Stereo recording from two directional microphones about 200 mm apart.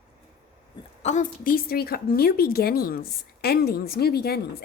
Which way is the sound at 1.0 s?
35° left (ahead or behind).